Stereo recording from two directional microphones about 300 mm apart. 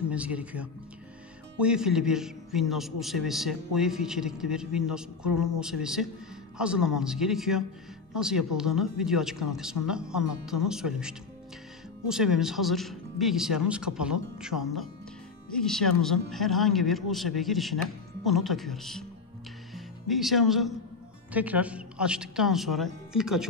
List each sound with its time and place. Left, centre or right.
0.1 s a man's voice: centre